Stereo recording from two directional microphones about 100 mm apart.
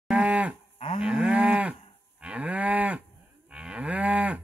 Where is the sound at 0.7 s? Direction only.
65° left (ahead or behind).